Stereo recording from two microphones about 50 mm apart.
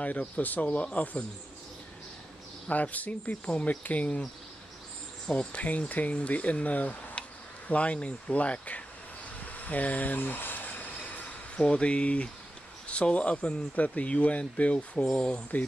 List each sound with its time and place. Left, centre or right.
0.0 s speech: left
2.7 s speech: left
5.6 s speech: left
9.6 s a sound: left
11.5 s speech: left